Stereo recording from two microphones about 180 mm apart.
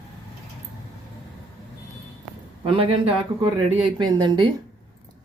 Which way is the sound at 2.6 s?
30° right (ahead or behind).